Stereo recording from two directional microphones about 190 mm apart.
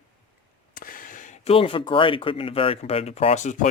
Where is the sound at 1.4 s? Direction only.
30° left (ahead or behind).